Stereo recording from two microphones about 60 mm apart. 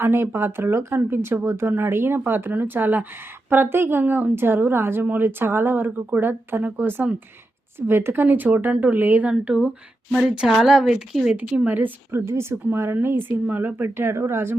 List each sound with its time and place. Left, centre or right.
0.0 s speech: right
0.9 s speech: right
9.3 s a woman's voice: centre
11.3 s speech: right
12.1 s speech: right